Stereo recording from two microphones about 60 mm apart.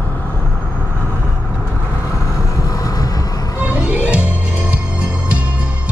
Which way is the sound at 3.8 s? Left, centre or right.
Right.